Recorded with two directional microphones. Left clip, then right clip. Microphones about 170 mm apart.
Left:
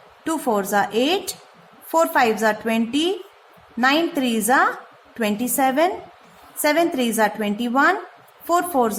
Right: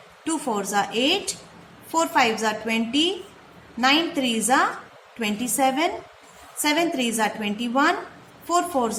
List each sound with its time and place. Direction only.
0.3 s a woman's voice: 55° left (ahead or behind)